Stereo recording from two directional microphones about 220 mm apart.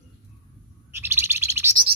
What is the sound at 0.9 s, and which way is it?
Bird, 10° right (ahead or behind).